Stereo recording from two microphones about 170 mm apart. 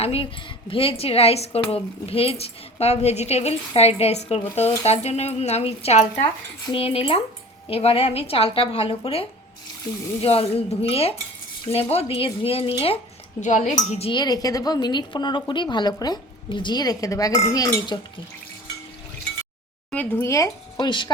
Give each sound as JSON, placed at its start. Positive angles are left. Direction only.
{"t": 0.0, "sound": "a woman's voice", "side_deg": 35}
{"t": 10.2, "sound": "a woman's voice", "side_deg": 35}
{"t": 13.4, "sound": "speech", "side_deg": 45}
{"t": 14.1, "sound": "a woman's voice", "side_deg": 25}
{"t": 19.9, "sound": "a woman's voice", "side_deg": 10}